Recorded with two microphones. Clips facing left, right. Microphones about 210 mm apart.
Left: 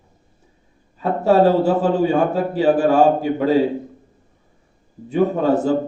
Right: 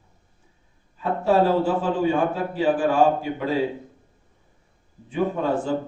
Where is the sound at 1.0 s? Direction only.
40° left (ahead or behind).